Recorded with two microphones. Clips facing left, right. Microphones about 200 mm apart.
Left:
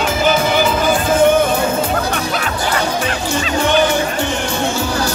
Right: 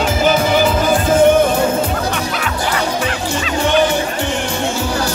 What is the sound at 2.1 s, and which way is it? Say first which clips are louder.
Music: left 1 dB; 40° left (ahead or behind).